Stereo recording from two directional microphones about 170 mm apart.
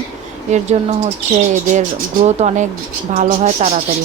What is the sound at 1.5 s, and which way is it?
Speech, 45° right (ahead or behind).